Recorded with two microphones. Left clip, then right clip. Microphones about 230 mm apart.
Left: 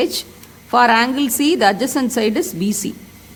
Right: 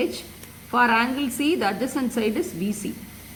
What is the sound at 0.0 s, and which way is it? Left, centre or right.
A woman's voice, left.